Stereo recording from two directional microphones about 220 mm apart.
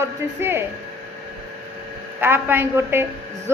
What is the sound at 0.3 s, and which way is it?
Speech, 10° right (ahead or behind).